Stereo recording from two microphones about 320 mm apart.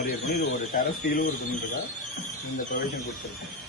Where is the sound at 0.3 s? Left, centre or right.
Left.